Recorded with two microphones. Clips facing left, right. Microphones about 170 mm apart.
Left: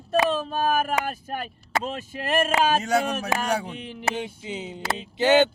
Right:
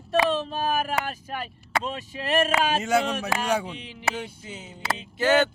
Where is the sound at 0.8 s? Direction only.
45° left (ahead or behind).